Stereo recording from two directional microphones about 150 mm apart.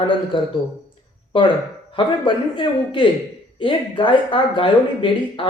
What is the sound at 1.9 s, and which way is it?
Speech, 30° left (ahead or behind).